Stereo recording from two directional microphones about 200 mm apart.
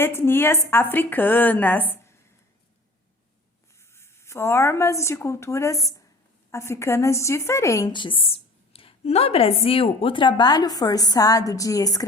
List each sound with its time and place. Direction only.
0.0 s a woman's voice: 10° left (ahead or behind)
3.9 s a woman's voice: 15° left (ahead or behind)